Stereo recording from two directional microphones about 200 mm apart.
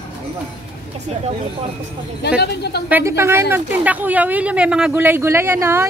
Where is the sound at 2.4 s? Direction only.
55° left (ahead or behind).